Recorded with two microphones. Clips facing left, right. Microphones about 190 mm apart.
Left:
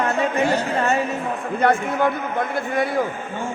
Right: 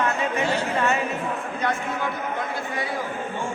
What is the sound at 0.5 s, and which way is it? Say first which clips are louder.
Music: left 3 dB; 40° left (ahead or behind).